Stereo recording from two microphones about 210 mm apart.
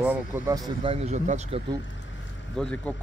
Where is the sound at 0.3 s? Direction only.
20° right (ahead or behind).